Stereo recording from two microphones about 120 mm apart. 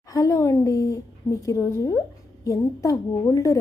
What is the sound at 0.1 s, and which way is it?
A woman's voice, 30° left (ahead or behind).